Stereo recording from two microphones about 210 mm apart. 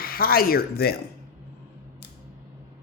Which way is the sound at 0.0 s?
45° left (ahead or behind).